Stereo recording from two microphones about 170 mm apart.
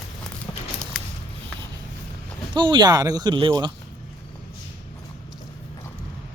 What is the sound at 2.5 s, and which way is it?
Speech, 25° right (ahead or behind).